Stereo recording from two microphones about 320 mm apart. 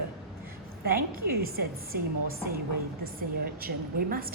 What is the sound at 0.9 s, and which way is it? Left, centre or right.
A woman's voice, right.